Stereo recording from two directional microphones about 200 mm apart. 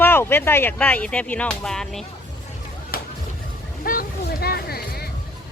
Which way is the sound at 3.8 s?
45° left (ahead or behind).